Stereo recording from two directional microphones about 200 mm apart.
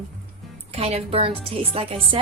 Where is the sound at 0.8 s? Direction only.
30° right (ahead or behind).